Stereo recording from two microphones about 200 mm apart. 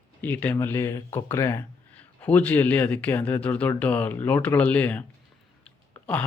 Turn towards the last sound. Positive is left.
turn(degrees=5)  # may be behind; listen again after turning